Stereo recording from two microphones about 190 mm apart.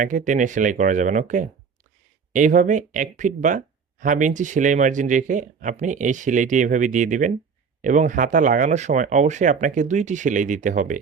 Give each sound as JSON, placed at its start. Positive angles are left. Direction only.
{"t": 0.0, "sound": "speech", "side_deg": -45}